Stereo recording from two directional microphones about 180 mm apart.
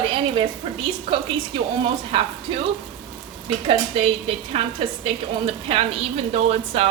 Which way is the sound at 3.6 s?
30° right (ahead or behind).